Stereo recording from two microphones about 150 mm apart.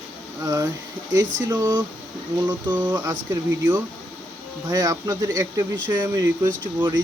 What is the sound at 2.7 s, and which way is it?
Speech, 10° right (ahead or behind).